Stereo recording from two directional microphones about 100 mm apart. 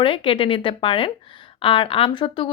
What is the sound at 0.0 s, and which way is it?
Speech, 60° left (ahead or behind).